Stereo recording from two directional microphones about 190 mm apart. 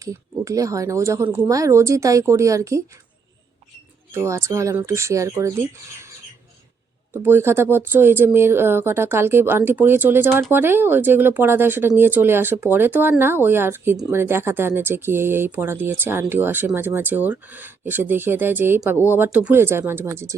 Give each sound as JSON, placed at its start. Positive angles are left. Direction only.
{"t": 0.0, "sound": "speech", "side_deg": -15}
{"t": 4.1, "sound": "speech", "side_deg": -15}
{"t": 7.1, "sound": "speech", "side_deg": -10}